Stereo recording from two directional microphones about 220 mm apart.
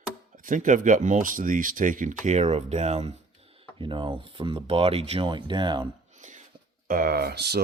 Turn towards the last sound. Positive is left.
turn(degrees=-50)  # may be behind; listen again after turning